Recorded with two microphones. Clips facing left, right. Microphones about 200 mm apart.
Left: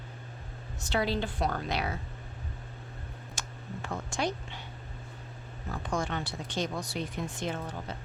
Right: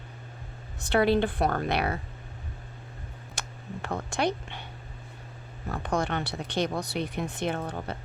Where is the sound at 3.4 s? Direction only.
65° right (ahead or behind).